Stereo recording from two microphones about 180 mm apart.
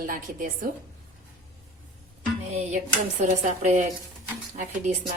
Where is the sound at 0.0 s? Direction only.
50° right (ahead or behind).